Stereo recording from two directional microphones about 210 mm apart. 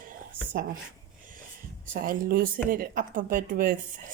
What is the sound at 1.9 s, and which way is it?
Speech, 45° right (ahead or behind).